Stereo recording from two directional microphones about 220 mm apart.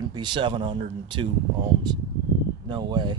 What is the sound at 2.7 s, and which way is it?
Speech, 20° right (ahead or behind).